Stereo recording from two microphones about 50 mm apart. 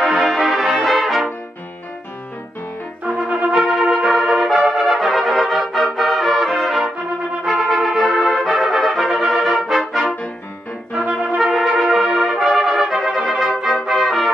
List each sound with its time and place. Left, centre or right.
0.0 s music: centre
3.2 s music: right
3.5 s brass instrument: centre
11.1 s brass instrument: right
11.3 s brass instrument: centre
13.8 s music: centre